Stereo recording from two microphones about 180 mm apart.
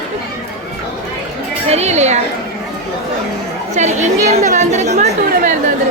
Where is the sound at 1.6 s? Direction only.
35° right (ahead or behind).